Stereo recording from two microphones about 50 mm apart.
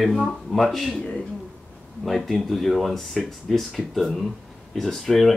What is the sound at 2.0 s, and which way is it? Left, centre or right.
Speech, centre.